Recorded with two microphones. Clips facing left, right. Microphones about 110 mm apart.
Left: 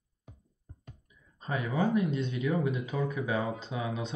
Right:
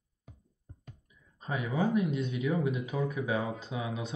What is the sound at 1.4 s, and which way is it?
Speech, 5° right (ahead or behind).